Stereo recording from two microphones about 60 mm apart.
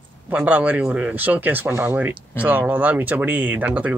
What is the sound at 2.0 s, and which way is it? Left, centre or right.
Speech, right.